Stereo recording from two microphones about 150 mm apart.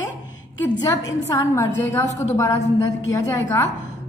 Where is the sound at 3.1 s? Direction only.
20° left (ahead or behind).